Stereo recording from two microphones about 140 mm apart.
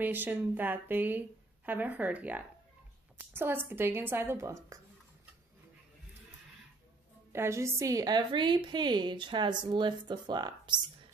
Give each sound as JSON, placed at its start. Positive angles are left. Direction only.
{"t": 0.0, "sound": "a woman's voice", "side_deg": -15}
{"t": 7.3, "sound": "a woman's voice", "side_deg": -20}